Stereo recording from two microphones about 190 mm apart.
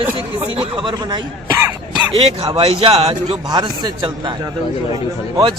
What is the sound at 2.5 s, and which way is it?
A man's voice, 30° right (ahead or behind).